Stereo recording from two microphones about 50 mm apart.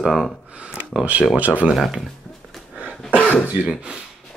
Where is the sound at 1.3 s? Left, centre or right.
Right.